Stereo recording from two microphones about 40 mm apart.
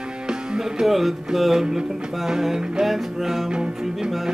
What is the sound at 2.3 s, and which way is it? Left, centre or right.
Music, centre.